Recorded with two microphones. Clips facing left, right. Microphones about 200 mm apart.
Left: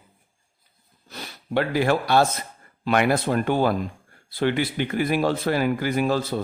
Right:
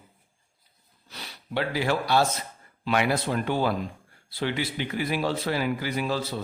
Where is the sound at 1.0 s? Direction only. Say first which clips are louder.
Left 6 dB; 50° left (ahead or behind).